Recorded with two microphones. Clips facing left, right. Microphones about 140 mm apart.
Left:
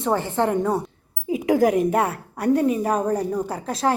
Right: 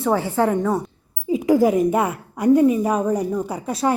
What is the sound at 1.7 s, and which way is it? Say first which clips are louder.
Speech: right 2 dB; centre (ahead or behind).